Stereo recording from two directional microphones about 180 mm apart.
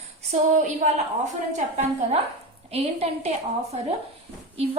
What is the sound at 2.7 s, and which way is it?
A woman's voice, 35° right (ahead or behind).